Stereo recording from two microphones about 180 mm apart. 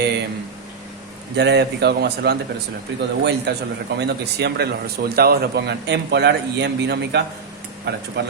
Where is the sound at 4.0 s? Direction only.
70° right (ahead or behind).